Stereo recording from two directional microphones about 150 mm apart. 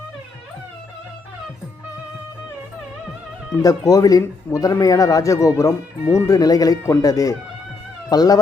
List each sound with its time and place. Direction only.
3.6 s speech: 25° left (ahead or behind)